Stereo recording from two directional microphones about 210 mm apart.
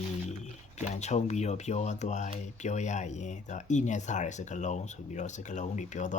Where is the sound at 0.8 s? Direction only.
35° left (ahead or behind).